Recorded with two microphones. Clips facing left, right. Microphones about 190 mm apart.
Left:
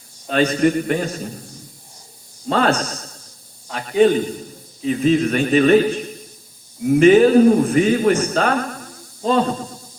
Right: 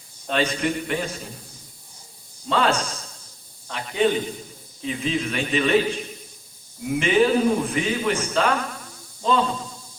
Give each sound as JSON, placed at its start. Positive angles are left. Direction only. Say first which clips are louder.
{"t": 0.3, "sound": "a man's voice", "louder": "left 7 dB", "side_deg": 45}
{"t": 2.5, "sound": "a man's voice", "louder": "left 4 dB", "side_deg": 45}